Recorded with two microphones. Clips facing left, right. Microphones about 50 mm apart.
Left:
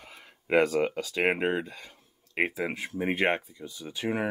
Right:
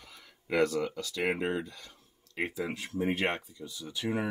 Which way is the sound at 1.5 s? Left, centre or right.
Left.